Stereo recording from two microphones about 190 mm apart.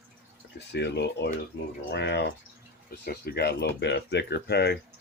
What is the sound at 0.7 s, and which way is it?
Speech, 65° left (ahead or behind).